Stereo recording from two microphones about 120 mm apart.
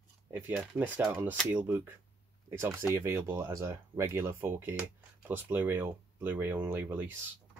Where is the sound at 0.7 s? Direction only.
15° right (ahead or behind).